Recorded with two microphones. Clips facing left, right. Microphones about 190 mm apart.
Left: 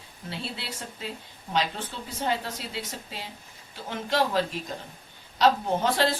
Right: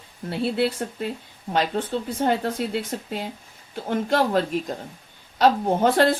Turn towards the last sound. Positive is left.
turn(degrees=-55)  # may be behind; listen again after turning